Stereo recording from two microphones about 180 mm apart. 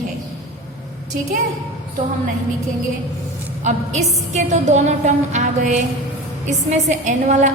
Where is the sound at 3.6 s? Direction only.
40° right (ahead or behind).